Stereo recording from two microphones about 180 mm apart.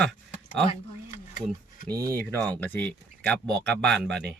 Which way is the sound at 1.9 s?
20° right (ahead or behind).